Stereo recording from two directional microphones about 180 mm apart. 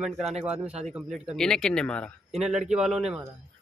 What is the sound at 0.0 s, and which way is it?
A man's voice, 5° right (ahead or behind).